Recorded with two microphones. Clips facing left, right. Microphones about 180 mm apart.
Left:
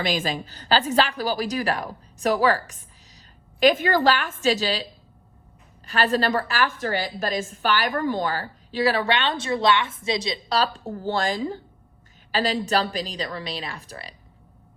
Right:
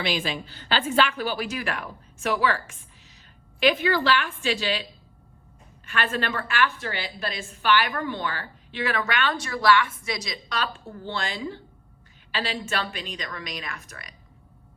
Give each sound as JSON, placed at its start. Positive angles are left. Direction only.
{"t": 0.0, "sound": "a woman's voice", "side_deg": 45}